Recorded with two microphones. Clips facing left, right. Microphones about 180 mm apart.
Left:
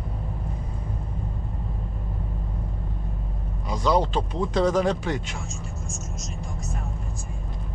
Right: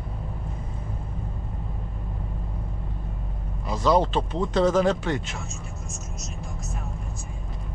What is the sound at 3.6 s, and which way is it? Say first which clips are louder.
Speech: right 1 dB; 5° right (ahead or behind).